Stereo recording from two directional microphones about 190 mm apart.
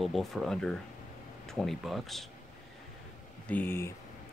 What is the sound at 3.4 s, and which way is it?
Speech, 10° left (ahead or behind).